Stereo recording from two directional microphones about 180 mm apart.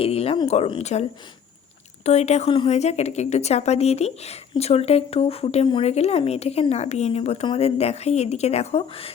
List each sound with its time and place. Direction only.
0.0 s a woman's voice: 35° left (ahead or behind)
2.0 s a woman's voice: 40° left (ahead or behind)